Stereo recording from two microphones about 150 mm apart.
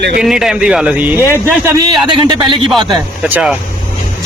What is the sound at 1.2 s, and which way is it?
Speech, 15° left (ahead or behind).